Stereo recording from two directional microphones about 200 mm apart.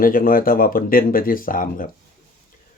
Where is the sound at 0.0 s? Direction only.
45° left (ahead or behind).